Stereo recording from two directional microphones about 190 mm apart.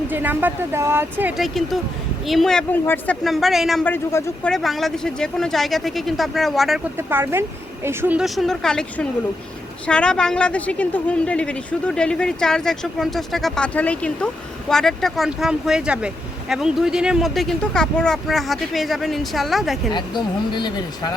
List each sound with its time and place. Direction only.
0.1 s speech: 10° right (ahead or behind)
2.2 s speech: centre (ahead or behind)
6.9 s speech: 10° right (ahead or behind)
19.9 s speech: 25° left (ahead or behind)